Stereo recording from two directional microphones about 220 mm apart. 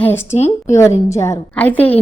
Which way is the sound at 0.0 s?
10° left (ahead or behind).